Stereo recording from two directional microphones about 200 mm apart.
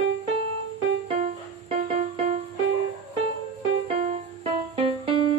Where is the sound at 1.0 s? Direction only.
35° right (ahead or behind).